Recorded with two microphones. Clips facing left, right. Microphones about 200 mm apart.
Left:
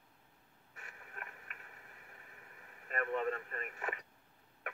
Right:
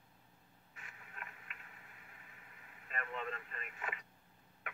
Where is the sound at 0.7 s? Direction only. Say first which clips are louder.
Left 3 dB; 45° left (ahead or behind).